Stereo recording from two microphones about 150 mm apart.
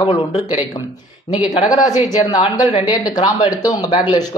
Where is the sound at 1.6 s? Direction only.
25° left (ahead or behind).